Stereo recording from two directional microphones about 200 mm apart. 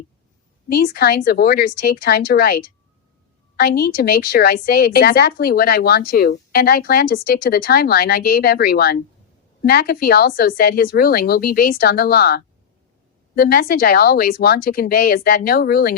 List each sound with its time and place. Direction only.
0.7 s speech: 50° left (ahead or behind)